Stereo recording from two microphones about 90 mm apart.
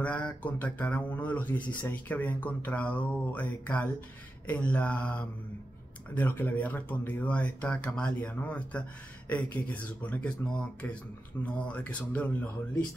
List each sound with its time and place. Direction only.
0.0 s speech: 15° left (ahead or behind)